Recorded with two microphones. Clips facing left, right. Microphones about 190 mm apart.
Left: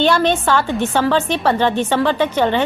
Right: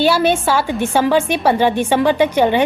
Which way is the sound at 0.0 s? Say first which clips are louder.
Right 1 dB; 10° right (ahead or behind).